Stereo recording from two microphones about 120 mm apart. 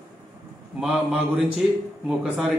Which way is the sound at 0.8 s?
5° right (ahead or behind).